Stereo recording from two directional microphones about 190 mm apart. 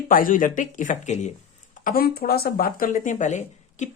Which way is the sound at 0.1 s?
45° left (ahead or behind).